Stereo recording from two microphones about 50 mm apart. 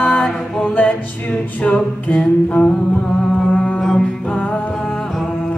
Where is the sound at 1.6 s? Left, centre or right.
Left.